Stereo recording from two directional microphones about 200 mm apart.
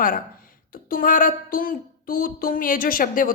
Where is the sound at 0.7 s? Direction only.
45° left (ahead or behind).